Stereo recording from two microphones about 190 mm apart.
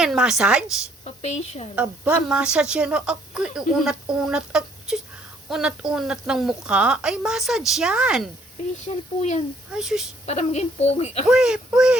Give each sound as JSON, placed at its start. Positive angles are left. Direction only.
{"t": 0.0, "sound": "a woman's voice", "side_deg": -5}
{"t": 1.0, "sound": "a woman's voice", "side_deg": 35}
{"t": 1.7, "sound": "a woman's voice", "side_deg": -5}
{"t": 9.7, "sound": "a woman's voice", "side_deg": 0}
{"t": 10.2, "sound": "a woman's voice", "side_deg": 35}
{"t": 11.3, "sound": "a woman's voice", "side_deg": -5}